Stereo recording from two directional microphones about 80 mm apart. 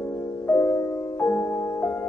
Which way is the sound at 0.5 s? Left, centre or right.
Left.